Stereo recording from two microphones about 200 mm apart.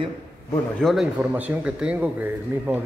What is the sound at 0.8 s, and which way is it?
A man's voice, centre (ahead or behind).